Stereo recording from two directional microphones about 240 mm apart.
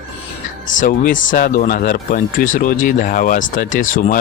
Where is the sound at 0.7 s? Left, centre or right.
Left.